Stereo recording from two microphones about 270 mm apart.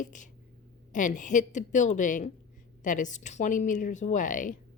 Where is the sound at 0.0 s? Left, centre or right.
Left.